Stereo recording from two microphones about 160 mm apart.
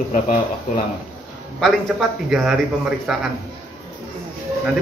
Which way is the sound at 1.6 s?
Centre (ahead or behind).